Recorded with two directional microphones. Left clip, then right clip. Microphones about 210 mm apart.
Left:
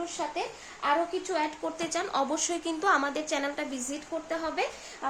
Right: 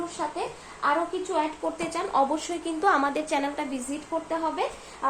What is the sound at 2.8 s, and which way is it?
Speech, 10° left (ahead or behind).